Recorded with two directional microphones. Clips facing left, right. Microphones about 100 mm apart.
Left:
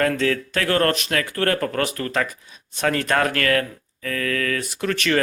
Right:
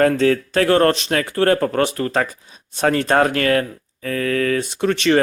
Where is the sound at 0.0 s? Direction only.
30° right (ahead or behind).